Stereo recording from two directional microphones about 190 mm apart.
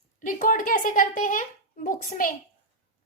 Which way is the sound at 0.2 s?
45° left (ahead or behind).